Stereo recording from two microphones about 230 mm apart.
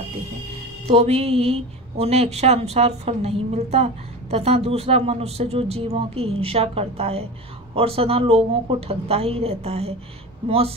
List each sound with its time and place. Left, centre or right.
0.8 s a woman's voice: right